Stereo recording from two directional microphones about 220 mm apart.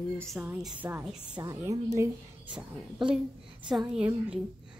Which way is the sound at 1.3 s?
15° right (ahead or behind).